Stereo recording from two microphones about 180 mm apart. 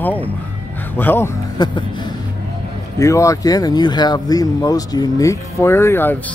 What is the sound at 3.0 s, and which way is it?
Speech, 15° left (ahead or behind).